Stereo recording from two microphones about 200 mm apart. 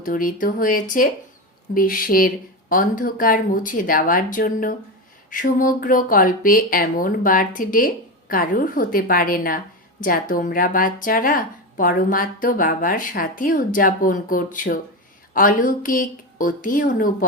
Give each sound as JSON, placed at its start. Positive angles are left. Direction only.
{"t": 0.0, "sound": "a woman's voice", "side_deg": 45}